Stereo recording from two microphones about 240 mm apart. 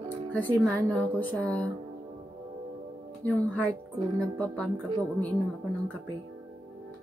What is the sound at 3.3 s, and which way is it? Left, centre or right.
A woman's voice, centre.